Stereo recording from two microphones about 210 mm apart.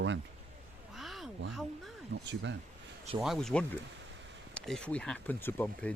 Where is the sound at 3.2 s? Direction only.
Centre (ahead or behind).